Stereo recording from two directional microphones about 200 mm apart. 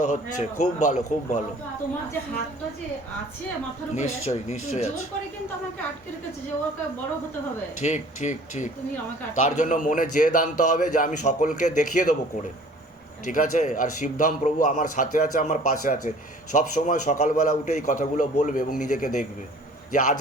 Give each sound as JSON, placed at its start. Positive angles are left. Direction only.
{"t": 0.0, "sound": "a man's voice", "side_deg": 40}
{"t": 3.9, "sound": "a man's voice", "side_deg": 35}
{"t": 7.8, "sound": "a man's voice", "side_deg": 35}
{"t": 13.2, "sound": "a man's voice", "side_deg": 40}